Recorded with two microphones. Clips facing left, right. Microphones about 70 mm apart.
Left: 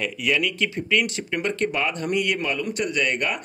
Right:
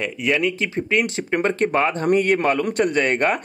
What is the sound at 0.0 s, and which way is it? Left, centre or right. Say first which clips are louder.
Speech: right 3 dB; right.